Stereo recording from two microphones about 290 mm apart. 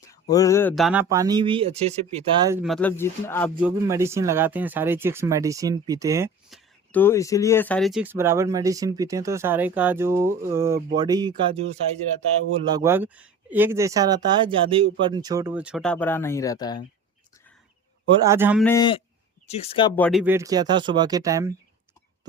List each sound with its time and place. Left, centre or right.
0.1 s speech: centre
2.6 s speech: centre
3.6 s speech: centre
6.9 s speech: centre
12.7 s speech: centre
18.2 s speech: centre
18.6 s speech: centre
20.0 s speech: centre